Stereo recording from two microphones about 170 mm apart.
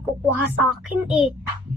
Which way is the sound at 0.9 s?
5° right (ahead or behind).